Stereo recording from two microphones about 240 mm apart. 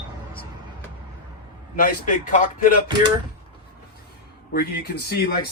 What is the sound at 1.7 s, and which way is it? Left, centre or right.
Speech, left.